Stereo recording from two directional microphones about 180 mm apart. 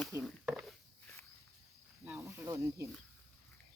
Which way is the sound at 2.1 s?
15° right (ahead or behind).